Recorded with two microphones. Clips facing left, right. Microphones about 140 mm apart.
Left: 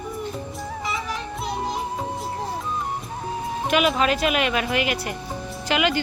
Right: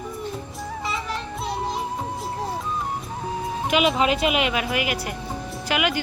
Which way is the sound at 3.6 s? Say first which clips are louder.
Even; 15° right (ahead or behind).